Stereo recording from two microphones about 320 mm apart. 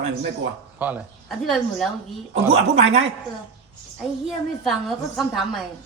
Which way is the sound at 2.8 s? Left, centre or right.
Right.